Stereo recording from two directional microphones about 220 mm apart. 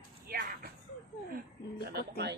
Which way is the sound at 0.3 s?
40° right (ahead or behind).